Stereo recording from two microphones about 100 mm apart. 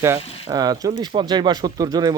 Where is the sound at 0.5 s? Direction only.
40° right (ahead or behind).